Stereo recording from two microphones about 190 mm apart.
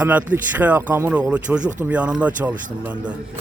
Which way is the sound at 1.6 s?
40° right (ahead or behind).